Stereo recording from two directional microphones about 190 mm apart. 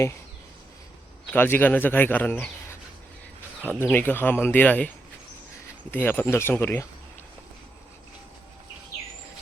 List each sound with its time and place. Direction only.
1.3 s speech: 10° left (ahead or behind)
5.9 s speech: 10° left (ahead or behind)